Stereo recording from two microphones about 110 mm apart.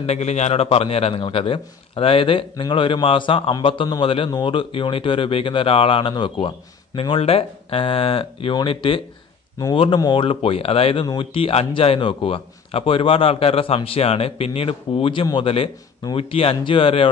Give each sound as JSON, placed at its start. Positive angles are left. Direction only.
{"t": 0.0, "sound": "a man's voice", "side_deg": 80}
{"t": 1.2, "sound": "a man's voice", "side_deg": 50}